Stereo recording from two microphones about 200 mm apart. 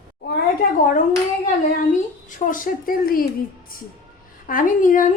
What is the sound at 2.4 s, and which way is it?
Speech, 40° left (ahead or behind).